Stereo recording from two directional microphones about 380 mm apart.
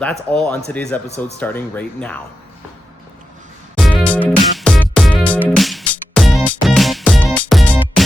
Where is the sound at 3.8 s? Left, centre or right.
Centre.